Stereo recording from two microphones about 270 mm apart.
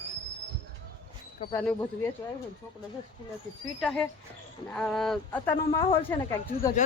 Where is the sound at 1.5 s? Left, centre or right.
Centre.